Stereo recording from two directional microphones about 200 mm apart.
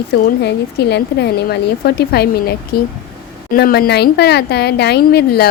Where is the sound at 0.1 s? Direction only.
55° left (ahead or behind).